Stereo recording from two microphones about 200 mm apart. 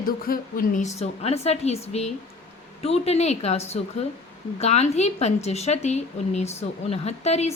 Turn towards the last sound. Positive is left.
turn(degrees=35)  # may be behind; listen again after turning